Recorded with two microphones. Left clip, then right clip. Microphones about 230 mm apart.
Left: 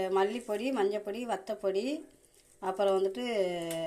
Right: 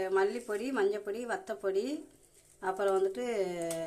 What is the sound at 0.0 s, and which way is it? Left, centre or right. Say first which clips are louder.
Speech: left 1 dB; centre.